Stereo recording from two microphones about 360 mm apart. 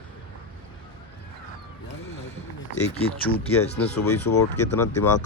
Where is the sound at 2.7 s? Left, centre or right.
Left.